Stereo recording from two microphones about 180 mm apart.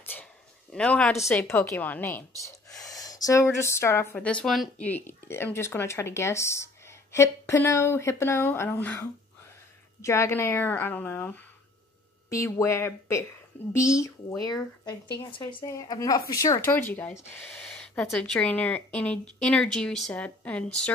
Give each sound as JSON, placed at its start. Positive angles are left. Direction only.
{"t": 0.0, "sound": "a sound", "side_deg": 10}
{"t": 1.4, "sound": "a woman's voice", "side_deg": 15}
{"t": 10.0, "sound": "a woman's voice", "side_deg": 15}